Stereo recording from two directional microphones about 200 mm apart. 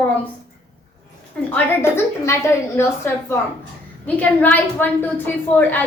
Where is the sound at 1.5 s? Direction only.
10° left (ahead or behind).